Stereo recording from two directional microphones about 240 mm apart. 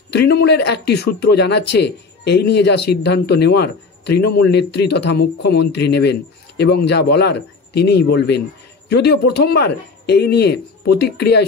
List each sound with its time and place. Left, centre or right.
0.1 s speech: left